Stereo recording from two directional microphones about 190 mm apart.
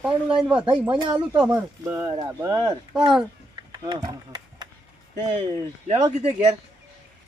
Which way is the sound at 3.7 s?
20° right (ahead or behind).